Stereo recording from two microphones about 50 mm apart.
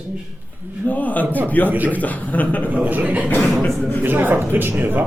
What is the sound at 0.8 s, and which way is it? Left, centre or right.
Speech, left.